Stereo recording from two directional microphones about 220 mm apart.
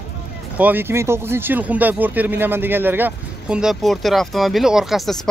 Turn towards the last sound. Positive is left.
turn(degrees=0)  # may be behind; listen again after turning